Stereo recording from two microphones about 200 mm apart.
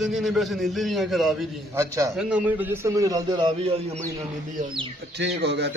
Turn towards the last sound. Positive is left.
turn(degrees=-60)  # may be behind; listen again after turning